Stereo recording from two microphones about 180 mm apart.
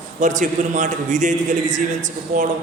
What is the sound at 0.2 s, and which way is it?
A man's voice, 45° right (ahead or behind).